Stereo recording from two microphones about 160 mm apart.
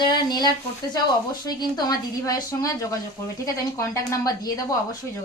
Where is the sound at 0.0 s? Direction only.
25° left (ahead or behind).